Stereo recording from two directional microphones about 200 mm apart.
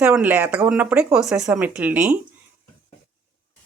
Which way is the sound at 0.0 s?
10° right (ahead or behind).